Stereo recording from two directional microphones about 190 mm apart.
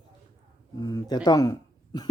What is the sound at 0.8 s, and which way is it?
Speech, 20° left (ahead or behind).